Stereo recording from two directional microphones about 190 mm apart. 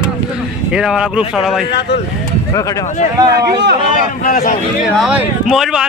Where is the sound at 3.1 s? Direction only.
20° right (ahead or behind).